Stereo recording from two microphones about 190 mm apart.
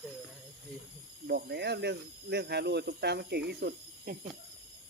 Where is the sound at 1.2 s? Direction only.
60° right (ahead or behind).